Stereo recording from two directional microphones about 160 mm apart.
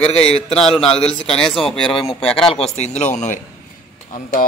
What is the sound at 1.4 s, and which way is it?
Speech, centre (ahead or behind).